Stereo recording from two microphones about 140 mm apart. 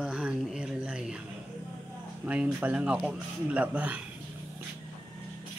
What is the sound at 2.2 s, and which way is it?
Speech, 10° right (ahead or behind).